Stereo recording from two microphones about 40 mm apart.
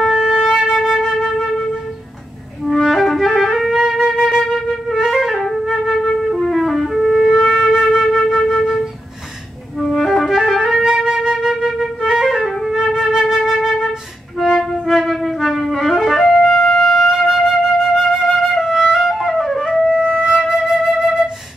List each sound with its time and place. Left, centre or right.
0.0 s flute: centre
2.8 s clarinet: centre
3.5 s flute: centre
5.4 s flute: centre
9.8 s music: centre
10.3 s music: centre
11.1 s flute: centre
14.4 s music: centre
18.7 s flute: centre
19.9 s flute: centre